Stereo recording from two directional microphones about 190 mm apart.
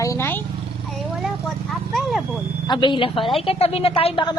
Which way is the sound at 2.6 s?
25° left (ahead or behind).